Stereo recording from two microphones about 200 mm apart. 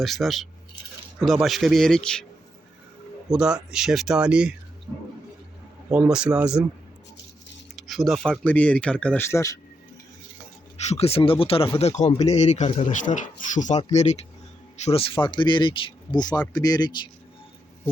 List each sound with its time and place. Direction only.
0.0 s speech: centre (ahead or behind)
3.2 s speech: 5° right (ahead or behind)
4.9 s vehicle: 10° right (ahead or behind)
5.9 s speech: 5° right (ahead or behind)
7.8 s speech: centre (ahead or behind)
10.8 s a man's voice: 30° left (ahead or behind)